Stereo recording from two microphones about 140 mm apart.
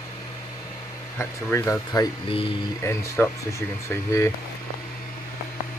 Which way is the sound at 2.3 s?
40° left (ahead or behind).